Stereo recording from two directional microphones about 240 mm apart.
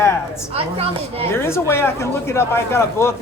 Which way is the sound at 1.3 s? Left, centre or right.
Centre.